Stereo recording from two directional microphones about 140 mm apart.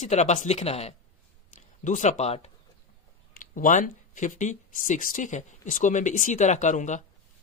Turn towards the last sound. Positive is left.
turn(degrees=60)  # may be behind; listen again after turning